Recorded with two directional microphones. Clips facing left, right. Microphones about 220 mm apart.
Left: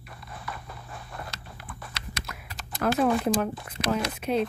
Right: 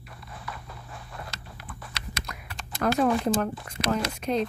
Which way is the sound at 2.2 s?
5° left (ahead or behind).